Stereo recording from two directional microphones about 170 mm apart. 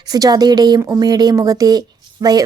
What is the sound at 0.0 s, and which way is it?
A woman's voice, 25° right (ahead or behind).